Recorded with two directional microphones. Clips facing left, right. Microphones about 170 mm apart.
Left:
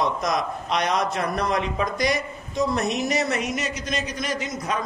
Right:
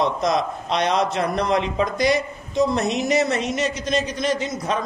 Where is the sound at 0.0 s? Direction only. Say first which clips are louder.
Right 3 dB; 25° right (ahead or behind).